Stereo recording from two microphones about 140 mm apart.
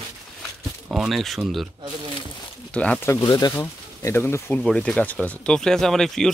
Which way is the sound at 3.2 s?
30° left (ahead or behind).